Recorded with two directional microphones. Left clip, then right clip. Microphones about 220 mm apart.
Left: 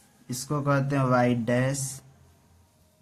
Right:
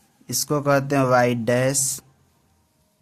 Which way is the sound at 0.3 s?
50° right (ahead or behind).